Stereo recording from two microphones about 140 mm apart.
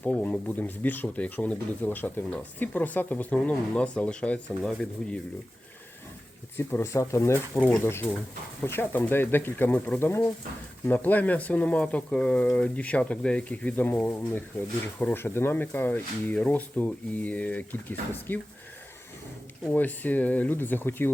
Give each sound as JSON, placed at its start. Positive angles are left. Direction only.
{"t": 0.0, "sound": "speech", "side_deg": 10}
{"t": 6.6, "sound": "speech", "side_deg": 15}
{"t": 19.6, "sound": "speech", "side_deg": 10}